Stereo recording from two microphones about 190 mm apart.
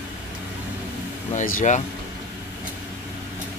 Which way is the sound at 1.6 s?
40° left (ahead or behind).